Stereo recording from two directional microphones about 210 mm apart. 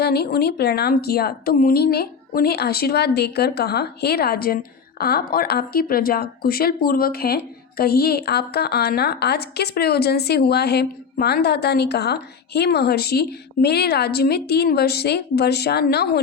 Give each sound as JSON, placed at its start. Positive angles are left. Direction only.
{"t": 0.0, "sound": "a woman's voice", "side_deg": 50}